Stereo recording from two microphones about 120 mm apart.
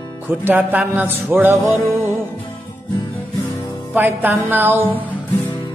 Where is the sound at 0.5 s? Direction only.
15° right (ahead or behind).